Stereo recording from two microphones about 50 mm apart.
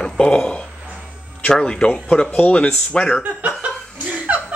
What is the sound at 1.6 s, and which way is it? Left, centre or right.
Speech, left.